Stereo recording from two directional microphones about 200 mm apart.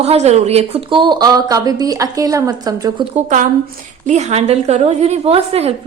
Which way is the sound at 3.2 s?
40° right (ahead or behind).